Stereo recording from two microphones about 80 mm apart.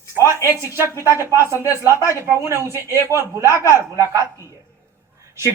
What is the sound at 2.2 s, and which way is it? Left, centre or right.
Speech, right.